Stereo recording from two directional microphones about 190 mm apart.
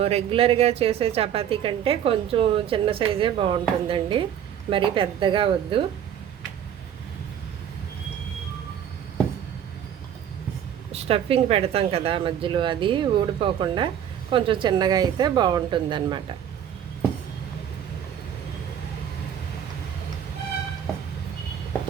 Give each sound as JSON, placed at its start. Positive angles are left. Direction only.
{"t": 0.0, "sound": "a woman's voice", "side_deg": -30}
{"t": 10.9, "sound": "a woman's voice", "side_deg": -30}